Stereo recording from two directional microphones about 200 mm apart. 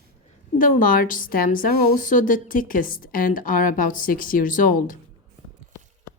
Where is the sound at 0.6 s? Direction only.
45° left (ahead or behind).